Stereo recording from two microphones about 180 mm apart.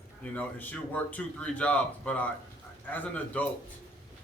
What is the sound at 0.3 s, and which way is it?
A man's voice, 10° left (ahead or behind).